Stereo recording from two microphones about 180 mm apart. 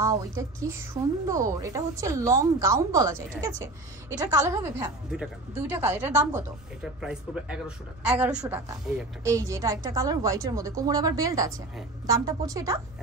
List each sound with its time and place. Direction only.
0.0 s a woman's voice: 20° right (ahead or behind)
5.1 s speech: 5° right (ahead or behind)
6.8 s a woman's voice: 5° right (ahead or behind)